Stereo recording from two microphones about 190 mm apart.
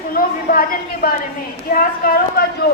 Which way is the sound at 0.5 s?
50° left (ahead or behind).